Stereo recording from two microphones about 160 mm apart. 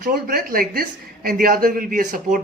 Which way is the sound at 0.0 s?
65° right (ahead or behind).